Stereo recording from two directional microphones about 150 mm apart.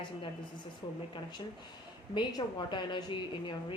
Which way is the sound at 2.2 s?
30° left (ahead or behind).